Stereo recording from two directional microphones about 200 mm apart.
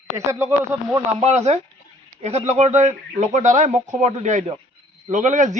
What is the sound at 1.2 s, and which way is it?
A man's voice, 35° right (ahead or behind).